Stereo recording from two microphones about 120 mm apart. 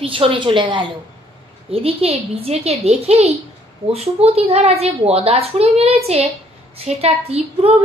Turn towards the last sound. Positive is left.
turn(degrees=-60)  # may be behind; listen again after turning